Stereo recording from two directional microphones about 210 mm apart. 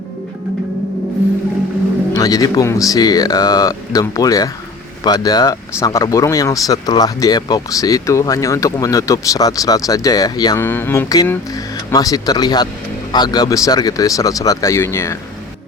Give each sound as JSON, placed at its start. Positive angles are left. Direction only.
{"t": 2.1, "sound": "speech", "side_deg": 15}